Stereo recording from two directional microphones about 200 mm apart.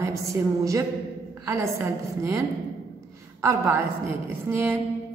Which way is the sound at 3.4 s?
15° right (ahead or behind).